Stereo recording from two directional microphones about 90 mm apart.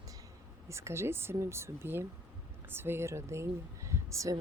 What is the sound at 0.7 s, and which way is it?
Speech, 30° right (ahead or behind).